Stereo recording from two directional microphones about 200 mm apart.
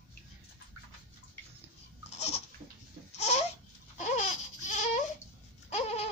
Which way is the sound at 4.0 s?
35° left (ahead or behind).